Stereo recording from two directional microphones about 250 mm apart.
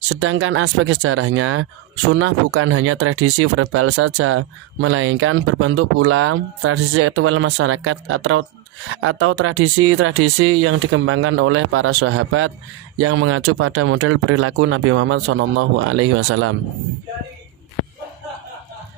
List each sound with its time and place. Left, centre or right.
0.1 s speech: right